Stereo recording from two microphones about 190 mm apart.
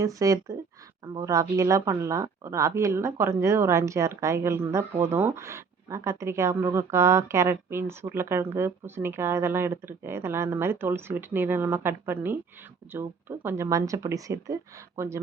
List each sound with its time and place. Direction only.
0.0 s speech: 15° right (ahead or behind)